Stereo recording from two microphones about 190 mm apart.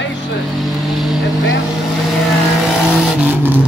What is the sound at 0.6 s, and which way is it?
Vehicle, centre (ahead or behind).